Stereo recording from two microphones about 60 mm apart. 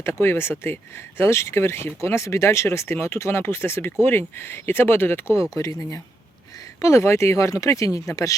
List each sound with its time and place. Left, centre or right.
0.0 s speech: left
5.4 s speech: left